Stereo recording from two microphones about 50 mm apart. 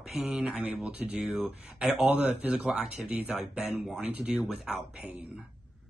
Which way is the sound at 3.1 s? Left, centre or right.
Right.